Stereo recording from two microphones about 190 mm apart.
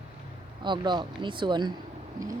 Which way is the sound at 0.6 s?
25° right (ahead or behind).